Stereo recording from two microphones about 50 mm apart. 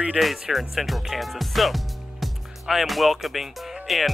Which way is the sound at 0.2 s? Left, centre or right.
Centre.